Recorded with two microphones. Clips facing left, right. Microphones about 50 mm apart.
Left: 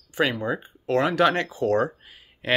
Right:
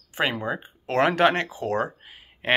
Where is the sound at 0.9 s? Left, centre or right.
Right.